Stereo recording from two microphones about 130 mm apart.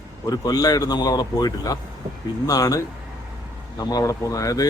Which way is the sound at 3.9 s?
30° left (ahead or behind).